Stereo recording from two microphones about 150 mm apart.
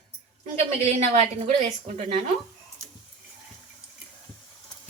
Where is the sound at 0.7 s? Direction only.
50° right (ahead or behind).